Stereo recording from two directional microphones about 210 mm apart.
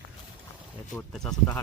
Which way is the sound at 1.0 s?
5° left (ahead or behind).